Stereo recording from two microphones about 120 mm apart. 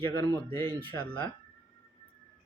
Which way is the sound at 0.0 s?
20° left (ahead or behind).